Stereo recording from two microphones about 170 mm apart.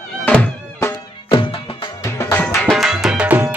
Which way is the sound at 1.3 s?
30° left (ahead or behind).